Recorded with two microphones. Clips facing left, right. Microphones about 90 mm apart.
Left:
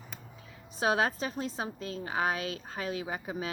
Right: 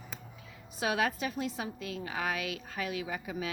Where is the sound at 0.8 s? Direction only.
30° left (ahead or behind).